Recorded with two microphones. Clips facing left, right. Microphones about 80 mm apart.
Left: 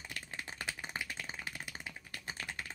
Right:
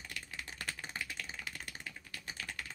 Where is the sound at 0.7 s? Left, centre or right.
Centre.